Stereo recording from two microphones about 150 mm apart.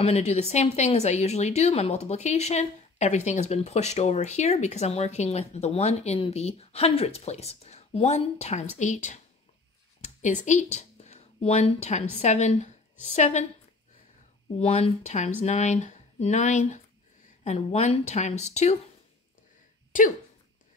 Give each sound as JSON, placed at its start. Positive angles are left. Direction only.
{"t": 0.0, "sound": "a woman's voice", "side_deg": 45}
{"t": 14.6, "sound": "a woman's voice", "side_deg": 50}